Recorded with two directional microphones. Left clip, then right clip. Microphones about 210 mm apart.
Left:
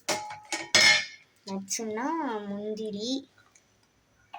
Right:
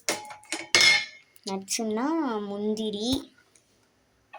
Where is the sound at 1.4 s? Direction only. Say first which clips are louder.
Right 4 dB; 25° right (ahead or behind).